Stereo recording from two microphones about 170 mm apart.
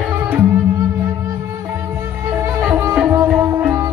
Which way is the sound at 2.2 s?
15° right (ahead or behind).